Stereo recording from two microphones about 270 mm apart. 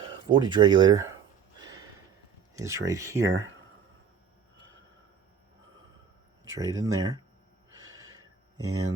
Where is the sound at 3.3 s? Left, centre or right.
Right.